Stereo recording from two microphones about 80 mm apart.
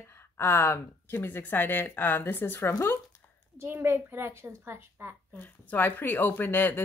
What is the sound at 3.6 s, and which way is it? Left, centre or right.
Speech, right.